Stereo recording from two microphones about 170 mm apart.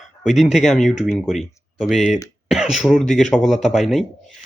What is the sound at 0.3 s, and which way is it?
Speech, 40° left (ahead or behind).